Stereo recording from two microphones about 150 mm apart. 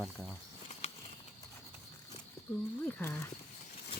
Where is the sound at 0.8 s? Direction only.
45° left (ahead or behind).